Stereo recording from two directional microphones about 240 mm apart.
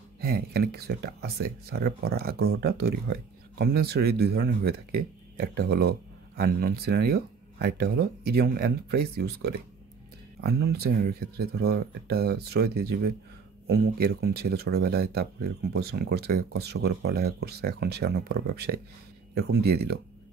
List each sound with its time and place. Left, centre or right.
0.2 s speech: right